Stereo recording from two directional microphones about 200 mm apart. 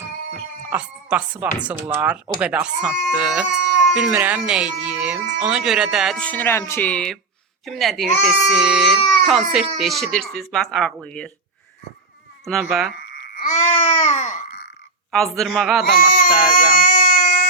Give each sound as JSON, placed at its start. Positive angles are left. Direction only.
{"t": 0.7, "sound": "speech", "side_deg": -5}
{"t": 12.5, "sound": "speech", "side_deg": 0}
{"t": 13.3, "sound": "babbling", "side_deg": 40}
{"t": 15.1, "sound": "speech", "side_deg": 0}
{"t": 16.0, "sound": "speech", "side_deg": 45}
{"t": 16.6, "sound": "baby cry", "side_deg": 40}